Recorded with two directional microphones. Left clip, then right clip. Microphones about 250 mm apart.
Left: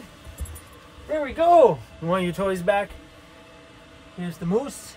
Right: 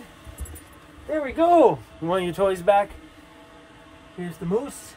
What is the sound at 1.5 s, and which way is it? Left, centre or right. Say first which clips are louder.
Speech: left 2 dB; right.